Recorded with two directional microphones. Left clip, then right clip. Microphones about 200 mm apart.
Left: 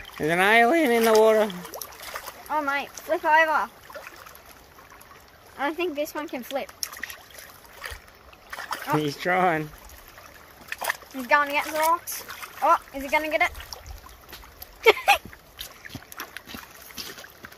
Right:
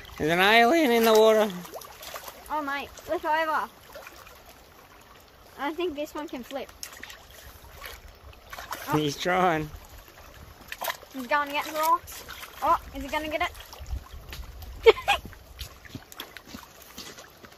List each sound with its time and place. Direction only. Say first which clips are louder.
0.2 s speech: left 1 dB; 10° right (ahead or behind)
2.5 s speech: left 4 dB; 60° left (ahead or behind)
5.6 s speech: left 3 dB; 55° left (ahead or behind)
8.5 s splash: left 4 dB; centre (ahead or behind)
9.2 s speech: left 2 dB; 10° right (ahead or behind)
10.7 s splash: left 4 dB; centre (ahead or behind)
11.2 s speech: left 5 dB; 60° left (ahead or behind)
12.6 s speech: left 4 dB; 55° left (ahead or behind)
14.8 s a sound: left 1 dB; 60° left (ahead or behind)
16.2 s boat: left 4 dB; 35° left (ahead or behind)